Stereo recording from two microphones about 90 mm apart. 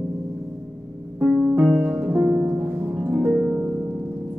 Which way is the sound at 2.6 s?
25° right (ahead or behind).